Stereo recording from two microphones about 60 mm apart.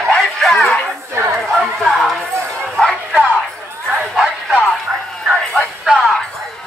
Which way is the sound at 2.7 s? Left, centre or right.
Centre.